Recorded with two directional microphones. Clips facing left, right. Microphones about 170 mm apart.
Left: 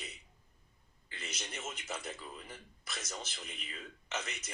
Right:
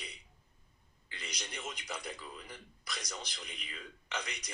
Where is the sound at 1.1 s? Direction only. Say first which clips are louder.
Even; 5° left (ahead or behind).